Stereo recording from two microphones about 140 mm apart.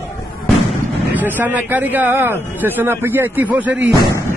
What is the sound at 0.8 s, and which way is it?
Speech, 15° right (ahead or behind).